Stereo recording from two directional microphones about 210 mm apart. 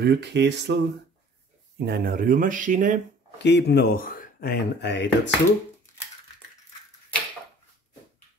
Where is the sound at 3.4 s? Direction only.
55° left (ahead or behind).